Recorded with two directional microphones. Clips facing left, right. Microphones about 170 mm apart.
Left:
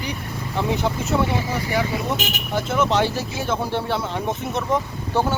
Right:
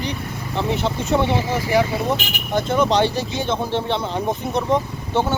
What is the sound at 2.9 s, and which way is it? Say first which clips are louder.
Speech: right 2 dB; 5° left (ahead or behind).